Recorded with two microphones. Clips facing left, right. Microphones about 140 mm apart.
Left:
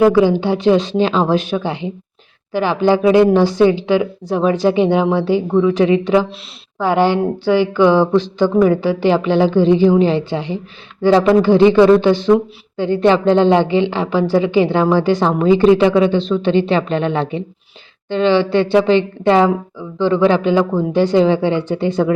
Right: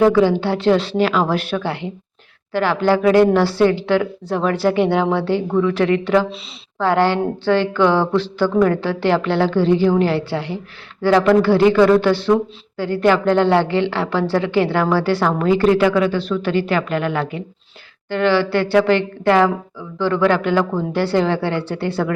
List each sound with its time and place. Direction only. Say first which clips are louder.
0.0 s a woman's voice: left 2 dB; 15° left (ahead or behind)